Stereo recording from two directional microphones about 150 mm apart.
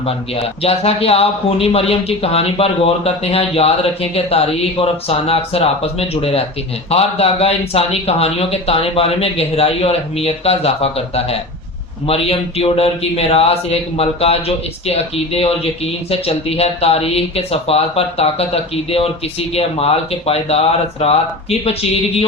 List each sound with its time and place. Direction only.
0.0 s speech: 40° left (ahead or behind)